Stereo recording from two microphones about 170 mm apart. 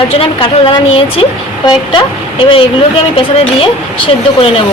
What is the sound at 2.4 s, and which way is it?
A woman's voice, 30° left (ahead or behind).